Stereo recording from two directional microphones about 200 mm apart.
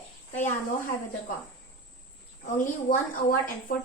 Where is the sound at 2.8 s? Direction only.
45° left (ahead or behind).